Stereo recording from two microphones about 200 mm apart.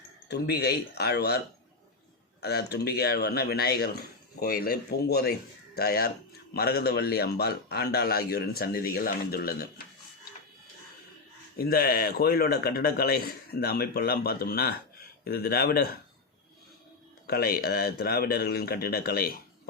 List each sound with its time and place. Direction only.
0.3 s a man's voice: 55° left (ahead or behind)
2.4 s a man's voice: 55° left (ahead or behind)
11.5 s a man's voice: 50° left (ahead or behind)
17.2 s a man's voice: 50° left (ahead or behind)